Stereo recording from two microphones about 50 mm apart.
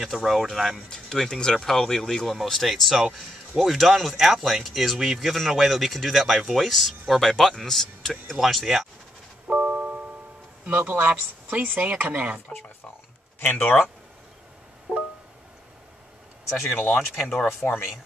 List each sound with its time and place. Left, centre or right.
0.0 s speech: centre
0.8 s speech: centre
9.5 s music: right
10.6 s speech: right
13.4 s speech: left
14.9 s music: centre
16.9 s speech: centre